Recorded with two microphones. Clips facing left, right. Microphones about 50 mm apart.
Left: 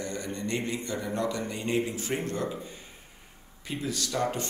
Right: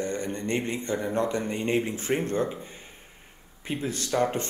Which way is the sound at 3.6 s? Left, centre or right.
Right.